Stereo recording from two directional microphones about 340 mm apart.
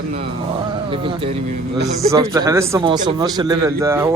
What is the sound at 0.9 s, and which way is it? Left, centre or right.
Speech, centre.